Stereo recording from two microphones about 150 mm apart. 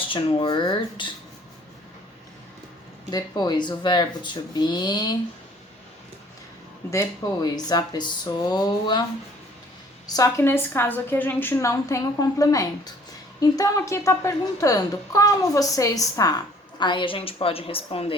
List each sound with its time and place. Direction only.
0.0 s speech: 35° left (ahead or behind)
3.1 s a woman's voice: 25° left (ahead or behind)
6.9 s a woman's voice: 25° left (ahead or behind)
10.1 s a woman's voice: 20° left (ahead or behind); by 18.1 s 40° left (ahead or behind)